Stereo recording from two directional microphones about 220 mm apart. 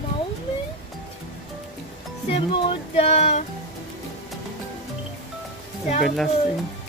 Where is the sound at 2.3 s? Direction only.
25° left (ahead or behind).